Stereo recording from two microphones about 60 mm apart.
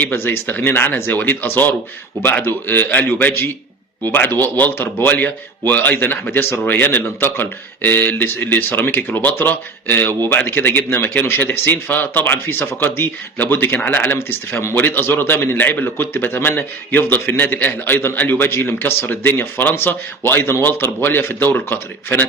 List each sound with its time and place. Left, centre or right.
0.0 s speech: left
10.8 s a man's voice: left